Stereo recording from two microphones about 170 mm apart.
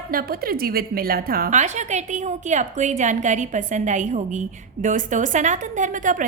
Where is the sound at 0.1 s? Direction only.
60° right (ahead or behind).